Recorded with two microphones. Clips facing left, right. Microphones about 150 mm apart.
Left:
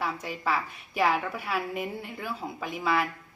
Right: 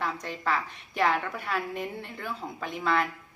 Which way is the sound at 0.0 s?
5° left (ahead or behind).